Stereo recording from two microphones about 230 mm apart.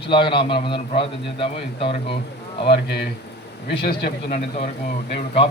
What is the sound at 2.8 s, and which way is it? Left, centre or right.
A man's voice, left.